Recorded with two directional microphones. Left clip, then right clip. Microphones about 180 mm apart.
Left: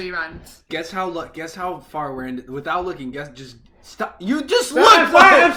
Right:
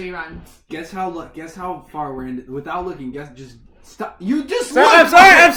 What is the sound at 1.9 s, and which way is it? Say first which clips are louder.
Speech: even; 10° right (ahead or behind).